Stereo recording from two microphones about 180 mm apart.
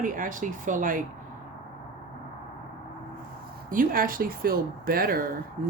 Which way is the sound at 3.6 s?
50° right (ahead or behind).